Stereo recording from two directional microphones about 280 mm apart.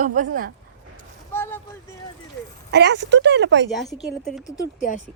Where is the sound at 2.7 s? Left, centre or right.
Right.